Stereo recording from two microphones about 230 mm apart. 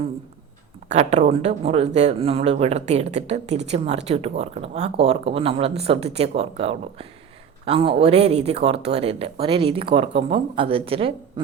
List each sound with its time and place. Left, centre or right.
0.9 s speech: right